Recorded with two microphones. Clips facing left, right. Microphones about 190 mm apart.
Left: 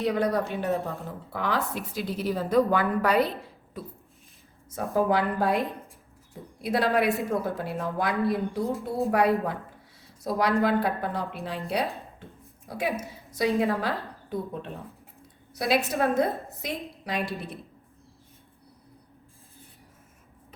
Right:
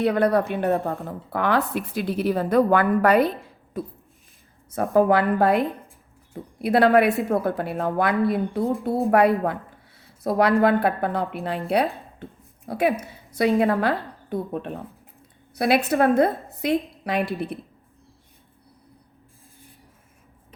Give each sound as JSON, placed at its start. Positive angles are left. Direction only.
{"t": 0.0, "sound": "a woman's voice", "side_deg": -60}
{"t": 3.8, "sound": "a sound", "side_deg": -50}
{"t": 4.7, "sound": "a woman's voice", "side_deg": -60}
{"t": 6.6, "sound": "a woman's voice", "side_deg": -60}
{"t": 12.6, "sound": "a woman's voice", "side_deg": -60}